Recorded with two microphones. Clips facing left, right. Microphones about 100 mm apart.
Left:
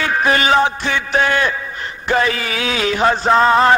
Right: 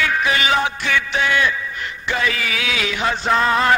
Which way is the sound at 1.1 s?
40° left (ahead or behind).